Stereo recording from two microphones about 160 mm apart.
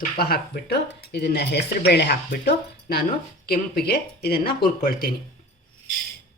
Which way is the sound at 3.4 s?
65° left (ahead or behind).